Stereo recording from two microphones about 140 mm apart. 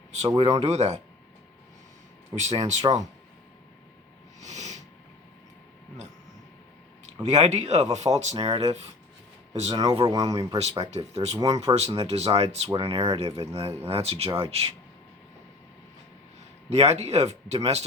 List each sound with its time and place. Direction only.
0.3 s speech: 45° right (ahead or behind)
2.3 s speech: 55° right (ahead or behind)
4.4 s a sound: 55° right (ahead or behind)
7.0 s speech: 50° right (ahead or behind)
8.1 s speech: 30° right (ahead or behind)
10.6 s speech: 50° right (ahead or behind)
11.3 s speech: 30° right (ahead or behind)
11.5 s speech: 50° right (ahead or behind)
16.6 s speech: 50° right (ahead or behind)